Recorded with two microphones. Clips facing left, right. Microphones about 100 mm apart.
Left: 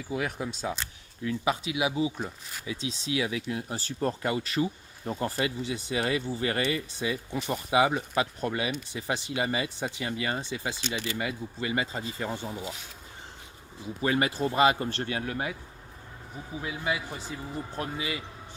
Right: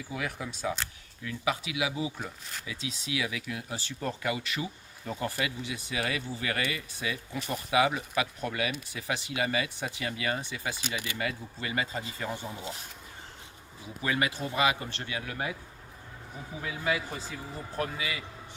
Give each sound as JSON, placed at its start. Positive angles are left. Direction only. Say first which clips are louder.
{"t": 0.1, "sound": "speech", "louder": "left 5 dB", "side_deg": 30}
{"t": 14.0, "sound": "speech", "louder": "left 4 dB", "side_deg": 30}
{"t": 16.6, "sound": "speech", "louder": "even", "side_deg": 20}
{"t": 17.7, "sound": "speech", "louder": "right 1 dB", "side_deg": 30}